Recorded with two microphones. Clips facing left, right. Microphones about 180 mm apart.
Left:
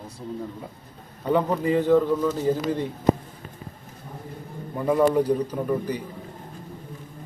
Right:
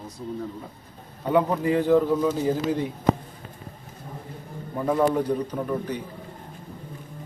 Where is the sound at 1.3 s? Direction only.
5° right (ahead or behind).